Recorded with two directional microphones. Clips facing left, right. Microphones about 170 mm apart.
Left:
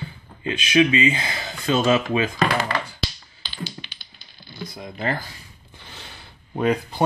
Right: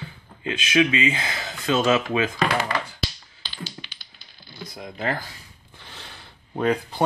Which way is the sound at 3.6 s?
20° left (ahead or behind).